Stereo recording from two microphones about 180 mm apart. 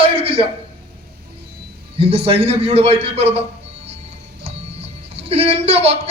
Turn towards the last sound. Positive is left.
turn(degrees=-35)  # may be behind; listen again after turning